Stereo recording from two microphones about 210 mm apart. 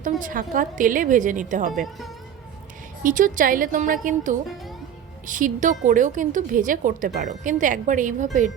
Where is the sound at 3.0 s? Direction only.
40° right (ahead or behind).